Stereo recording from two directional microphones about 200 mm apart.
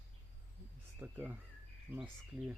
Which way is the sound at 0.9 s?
10° right (ahead or behind).